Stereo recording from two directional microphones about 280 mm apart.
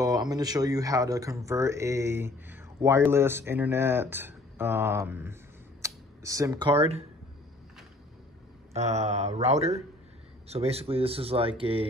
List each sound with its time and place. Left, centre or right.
0.0 s speech: centre
8.7 s speech: right